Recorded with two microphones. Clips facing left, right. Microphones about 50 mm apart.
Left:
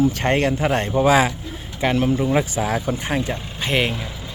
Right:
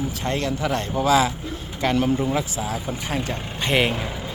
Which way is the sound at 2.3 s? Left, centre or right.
Left.